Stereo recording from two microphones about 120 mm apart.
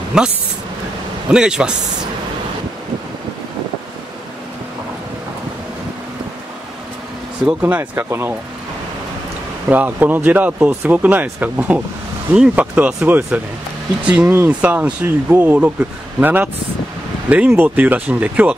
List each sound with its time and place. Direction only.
0.1 s speech: 5° right (ahead or behind)
1.3 s speech: 5° right (ahead or behind)
7.6 s speech: 15° right (ahead or behind)
9.7 s speech: 15° right (ahead or behind)